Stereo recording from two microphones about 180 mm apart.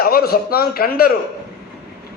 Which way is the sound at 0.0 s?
55° left (ahead or behind).